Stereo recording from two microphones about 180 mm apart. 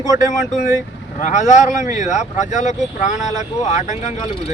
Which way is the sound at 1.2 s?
40° left (ahead or behind).